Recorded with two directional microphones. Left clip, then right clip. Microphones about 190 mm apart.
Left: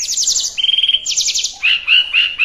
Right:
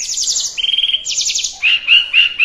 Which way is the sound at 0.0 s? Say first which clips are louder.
Left 1 dB; 20° left (ahead or behind).